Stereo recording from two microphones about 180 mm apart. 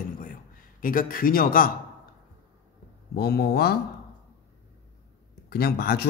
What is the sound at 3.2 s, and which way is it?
Speech, 65° left (ahead or behind).